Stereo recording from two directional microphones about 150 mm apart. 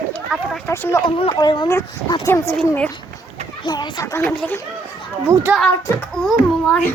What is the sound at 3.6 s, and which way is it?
Speech, 30° left (ahead or behind).